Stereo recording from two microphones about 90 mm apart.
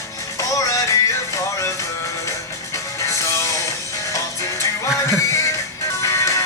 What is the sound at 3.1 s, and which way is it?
Music, 35° left (ahead or behind).